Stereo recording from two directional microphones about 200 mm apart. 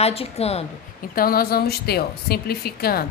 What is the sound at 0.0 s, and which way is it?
Speech, 30° left (ahead or behind).